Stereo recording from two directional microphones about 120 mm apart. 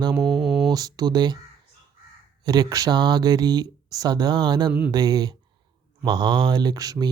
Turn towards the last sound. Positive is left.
turn(degrees=-30)  # may be behind; listen again after turning